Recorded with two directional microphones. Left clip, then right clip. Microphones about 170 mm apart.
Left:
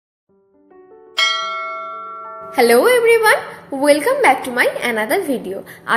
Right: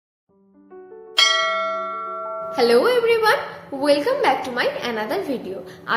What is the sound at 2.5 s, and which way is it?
A woman's voice, 45° left (ahead or behind).